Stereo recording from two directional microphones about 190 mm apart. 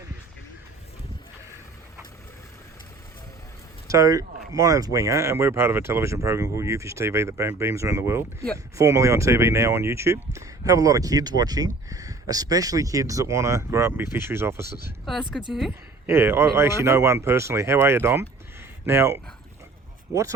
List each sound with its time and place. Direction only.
3.8 s speech: 20° right (ahead or behind)
15.3 s speech: centre (ahead or behind)
16.0 s speech: 15° right (ahead or behind)